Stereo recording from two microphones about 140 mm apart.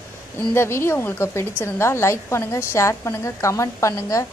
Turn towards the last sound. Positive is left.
turn(degrees=20)  # may be behind; listen again after turning